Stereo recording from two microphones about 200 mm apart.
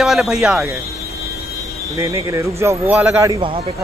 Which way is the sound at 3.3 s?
25° right (ahead or behind).